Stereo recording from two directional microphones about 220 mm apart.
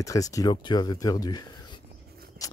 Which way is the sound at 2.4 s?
15° left (ahead or behind).